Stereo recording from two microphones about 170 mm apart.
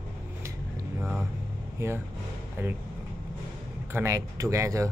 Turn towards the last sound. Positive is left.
turn(degrees=-20)  # may be behind; listen again after turning